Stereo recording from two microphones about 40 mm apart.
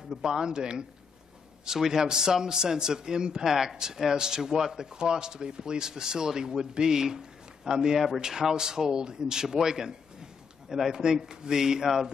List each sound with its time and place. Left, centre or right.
0.2 s a man's voice: centre